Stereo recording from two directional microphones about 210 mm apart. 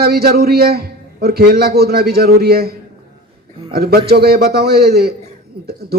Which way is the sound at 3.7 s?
50° right (ahead or behind).